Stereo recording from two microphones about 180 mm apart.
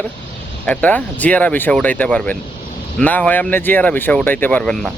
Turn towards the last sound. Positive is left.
turn(degrees=5)  # may be behind; listen again after turning